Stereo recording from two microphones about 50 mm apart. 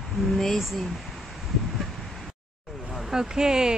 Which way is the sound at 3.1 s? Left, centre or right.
Centre.